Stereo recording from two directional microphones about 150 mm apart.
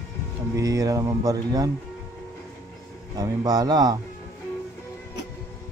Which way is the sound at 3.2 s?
25° right (ahead or behind).